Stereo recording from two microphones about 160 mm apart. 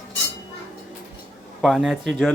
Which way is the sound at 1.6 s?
Centre (ahead or behind).